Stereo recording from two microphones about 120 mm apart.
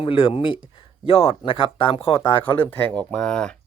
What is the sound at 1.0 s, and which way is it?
Speech, 60° left (ahead or behind).